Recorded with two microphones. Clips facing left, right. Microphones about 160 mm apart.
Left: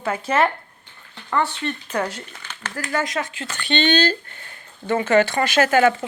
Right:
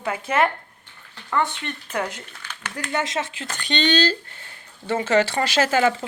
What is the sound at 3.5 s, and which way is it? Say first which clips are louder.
Speech: left 4 dB; 40° right (ahead or behind).